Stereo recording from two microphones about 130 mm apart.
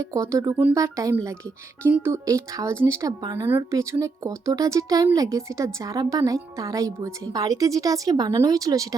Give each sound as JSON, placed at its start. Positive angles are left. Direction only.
{"t": 0.0, "sound": "speech", "side_deg": -25}